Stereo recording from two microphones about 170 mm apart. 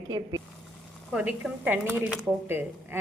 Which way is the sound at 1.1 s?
10° right (ahead or behind).